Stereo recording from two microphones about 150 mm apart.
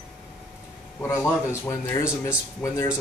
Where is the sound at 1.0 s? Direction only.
15° left (ahead or behind).